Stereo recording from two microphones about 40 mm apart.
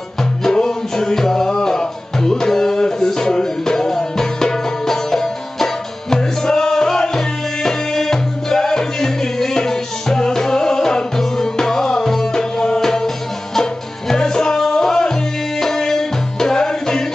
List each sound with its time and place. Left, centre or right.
0.4 s music: centre